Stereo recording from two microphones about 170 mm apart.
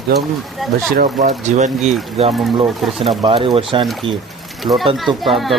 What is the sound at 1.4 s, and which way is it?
Speech, 45° right (ahead or behind).